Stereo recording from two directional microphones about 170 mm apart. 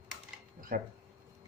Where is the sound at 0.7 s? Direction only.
55° right (ahead or behind).